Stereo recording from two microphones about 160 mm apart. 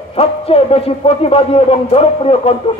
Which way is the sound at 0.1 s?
40° left (ahead or behind).